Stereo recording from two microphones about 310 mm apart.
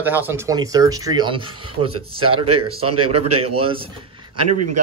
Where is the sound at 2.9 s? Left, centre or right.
Right.